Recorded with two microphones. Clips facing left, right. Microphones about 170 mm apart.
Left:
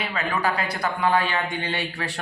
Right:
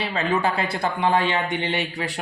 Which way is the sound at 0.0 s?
30° right (ahead or behind).